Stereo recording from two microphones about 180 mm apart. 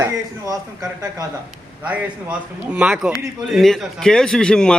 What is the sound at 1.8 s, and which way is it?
A man's voice, 5° right (ahead or behind).